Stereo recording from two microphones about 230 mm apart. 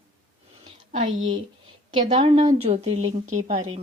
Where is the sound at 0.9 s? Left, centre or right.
Right.